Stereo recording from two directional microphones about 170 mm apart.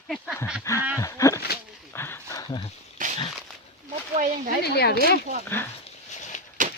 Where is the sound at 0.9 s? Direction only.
20° left (ahead or behind).